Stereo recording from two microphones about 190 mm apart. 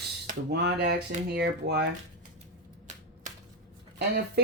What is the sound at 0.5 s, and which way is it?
Speech, 60° right (ahead or behind).